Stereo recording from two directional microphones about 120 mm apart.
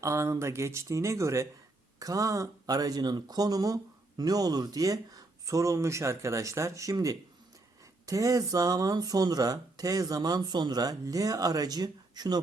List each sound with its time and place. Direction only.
0.0 s speech: 25° right (ahead or behind)